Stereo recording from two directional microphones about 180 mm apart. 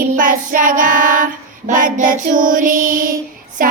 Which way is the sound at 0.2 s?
50° right (ahead or behind).